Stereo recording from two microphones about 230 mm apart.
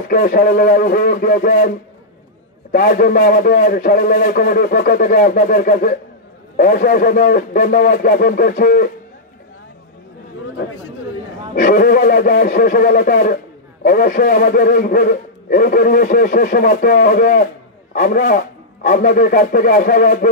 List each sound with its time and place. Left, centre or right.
0.1 s a man's voice: left
11.5 s a man's voice: left